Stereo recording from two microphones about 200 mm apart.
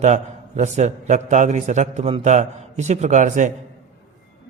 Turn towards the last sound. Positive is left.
turn(degrees=-40)  # may be behind; listen again after turning